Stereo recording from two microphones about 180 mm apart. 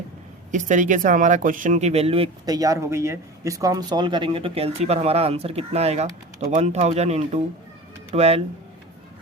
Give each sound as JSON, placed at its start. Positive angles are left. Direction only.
{"t": 0.5, "sound": "speech", "side_deg": -45}
{"t": 2.5, "sound": "speech", "side_deg": -20}